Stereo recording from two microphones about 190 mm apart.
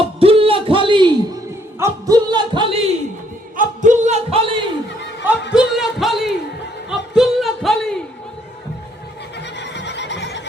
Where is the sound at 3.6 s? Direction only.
40° right (ahead or behind).